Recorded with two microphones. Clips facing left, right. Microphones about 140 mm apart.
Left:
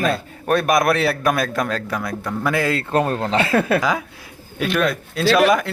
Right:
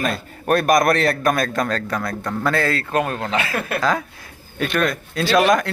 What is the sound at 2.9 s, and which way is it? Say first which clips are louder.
Speech: left 4 dB; 30° left (ahead or behind).